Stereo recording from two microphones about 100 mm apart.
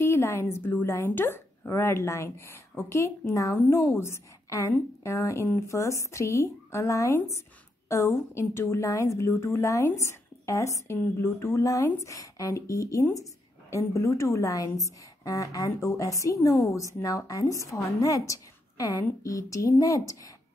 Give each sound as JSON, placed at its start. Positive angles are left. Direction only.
{"t": 0.0, "sound": "a woman's voice", "side_deg": 25}